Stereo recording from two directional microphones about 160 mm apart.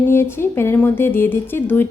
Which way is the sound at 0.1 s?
15° left (ahead or behind).